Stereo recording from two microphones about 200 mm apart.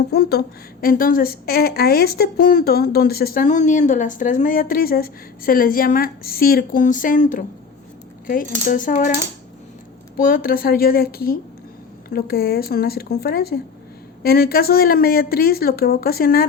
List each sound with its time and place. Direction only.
0.1 s a woman's voice: 55° left (ahead or behind)
10.2 s a woman's voice: 45° left (ahead or behind)